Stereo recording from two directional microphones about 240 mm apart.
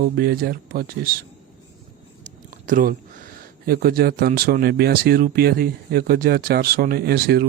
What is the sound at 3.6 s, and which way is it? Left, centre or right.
Speech, right.